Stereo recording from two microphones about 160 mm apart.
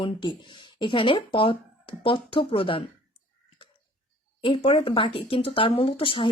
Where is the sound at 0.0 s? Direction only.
30° left (ahead or behind).